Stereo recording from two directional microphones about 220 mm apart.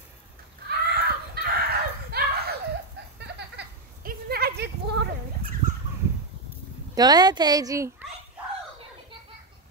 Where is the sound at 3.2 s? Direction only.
45° right (ahead or behind).